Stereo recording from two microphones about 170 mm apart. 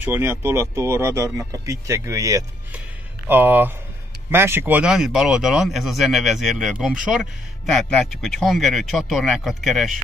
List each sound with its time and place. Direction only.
0.0 s speech: 15° right (ahead or behind)